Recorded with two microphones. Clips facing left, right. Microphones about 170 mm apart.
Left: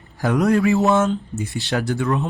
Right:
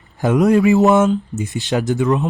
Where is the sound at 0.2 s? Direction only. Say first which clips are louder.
Right 4 dB; 20° right (ahead or behind).